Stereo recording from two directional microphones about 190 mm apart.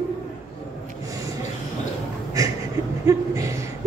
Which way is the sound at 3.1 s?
15° right (ahead or behind).